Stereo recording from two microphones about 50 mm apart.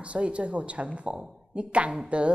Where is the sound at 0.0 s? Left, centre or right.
Right.